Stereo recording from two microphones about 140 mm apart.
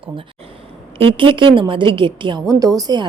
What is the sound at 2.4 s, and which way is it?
Speech, 25° right (ahead or behind).